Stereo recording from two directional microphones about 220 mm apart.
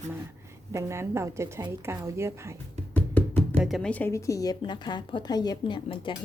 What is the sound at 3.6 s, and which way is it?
A woman's voice, centre (ahead or behind).